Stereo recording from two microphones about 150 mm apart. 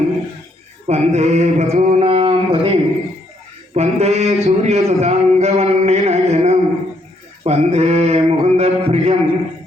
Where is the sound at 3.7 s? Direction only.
45° right (ahead or behind).